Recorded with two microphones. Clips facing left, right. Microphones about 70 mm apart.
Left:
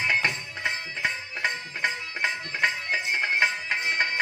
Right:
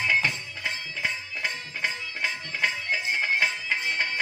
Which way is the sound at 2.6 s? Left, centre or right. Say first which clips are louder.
Left 1 dB; left.